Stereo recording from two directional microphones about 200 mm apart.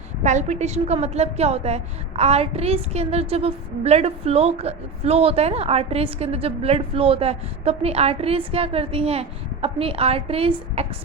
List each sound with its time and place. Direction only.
0.2 s a woman's voice: 35° right (ahead or behind)